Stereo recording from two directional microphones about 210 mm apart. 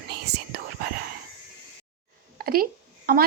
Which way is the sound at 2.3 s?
45° right (ahead or behind).